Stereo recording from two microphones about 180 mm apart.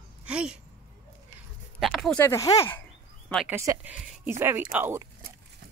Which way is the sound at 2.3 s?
15° left (ahead or behind).